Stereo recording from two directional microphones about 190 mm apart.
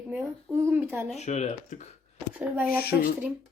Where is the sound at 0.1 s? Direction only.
10° right (ahead or behind).